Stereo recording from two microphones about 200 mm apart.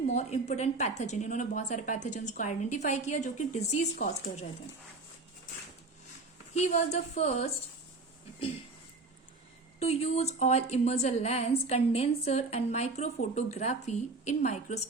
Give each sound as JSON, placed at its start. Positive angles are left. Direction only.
{"t": 0.1, "sound": "a woman's voice", "side_deg": 35}
{"t": 6.5, "sound": "a woman's voice", "side_deg": 35}
{"t": 9.8, "sound": "a woman's voice", "side_deg": 30}